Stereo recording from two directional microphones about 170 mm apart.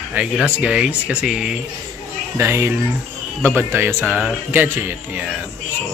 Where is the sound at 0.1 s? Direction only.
5° right (ahead or behind).